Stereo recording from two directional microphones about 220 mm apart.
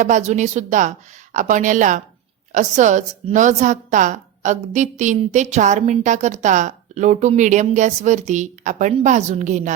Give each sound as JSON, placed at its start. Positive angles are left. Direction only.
{"t": 0.0, "sound": "a woman's voice", "side_deg": -35}